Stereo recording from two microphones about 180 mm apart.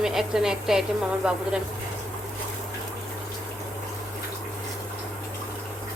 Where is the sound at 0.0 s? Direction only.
Centre (ahead or behind).